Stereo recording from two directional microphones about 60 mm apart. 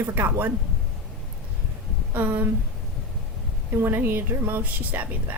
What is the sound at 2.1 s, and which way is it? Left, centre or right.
Speech, right.